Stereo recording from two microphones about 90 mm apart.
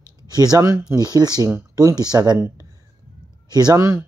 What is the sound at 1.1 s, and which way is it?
Speech, 50° right (ahead or behind).